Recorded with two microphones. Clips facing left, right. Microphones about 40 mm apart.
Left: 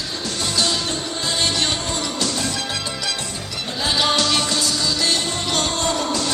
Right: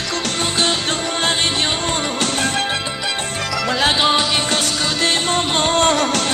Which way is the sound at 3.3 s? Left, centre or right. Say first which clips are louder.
Right 8 dB; right.